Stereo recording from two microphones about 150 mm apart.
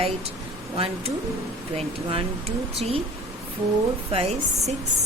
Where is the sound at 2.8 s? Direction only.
40° right (ahead or behind).